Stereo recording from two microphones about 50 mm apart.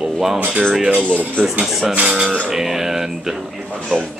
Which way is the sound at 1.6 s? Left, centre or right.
Centre.